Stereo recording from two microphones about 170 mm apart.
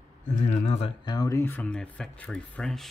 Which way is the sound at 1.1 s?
20° left (ahead or behind).